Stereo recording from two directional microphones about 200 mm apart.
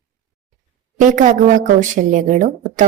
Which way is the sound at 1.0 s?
40° right (ahead or behind).